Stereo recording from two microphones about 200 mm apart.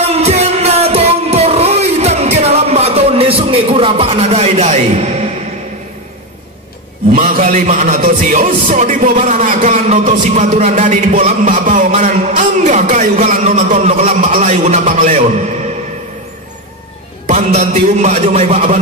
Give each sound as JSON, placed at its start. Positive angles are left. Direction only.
{"t": 0.0, "sound": "music", "side_deg": -30}
{"t": 7.2, "sound": "a man's voice", "side_deg": -40}
{"t": 17.3, "sound": "a man's voice", "side_deg": -35}